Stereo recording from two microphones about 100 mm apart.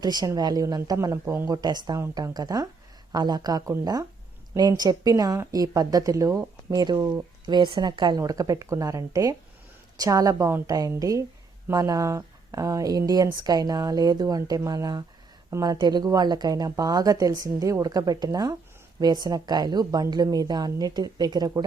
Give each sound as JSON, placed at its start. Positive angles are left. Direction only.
{"t": 0.0, "sound": "a woman's voice", "side_deg": -45}
{"t": 1.5, "sound": "a woman's voice", "side_deg": -45}
{"t": 7.4, "sound": "a woman's voice", "side_deg": -50}
{"t": 8.2, "sound": "a woman's voice", "side_deg": -35}